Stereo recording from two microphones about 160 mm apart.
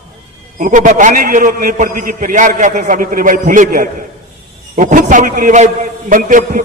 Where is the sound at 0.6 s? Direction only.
50° right (ahead or behind).